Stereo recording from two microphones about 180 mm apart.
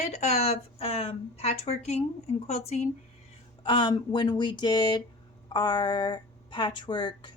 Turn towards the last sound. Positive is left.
turn(degrees=25)  # may be behind; listen again after turning